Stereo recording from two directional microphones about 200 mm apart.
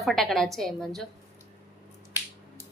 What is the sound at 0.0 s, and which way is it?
A child's voice, centre (ahead or behind).